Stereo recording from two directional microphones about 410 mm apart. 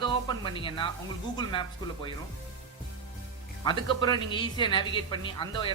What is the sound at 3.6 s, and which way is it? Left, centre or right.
Speech, centre.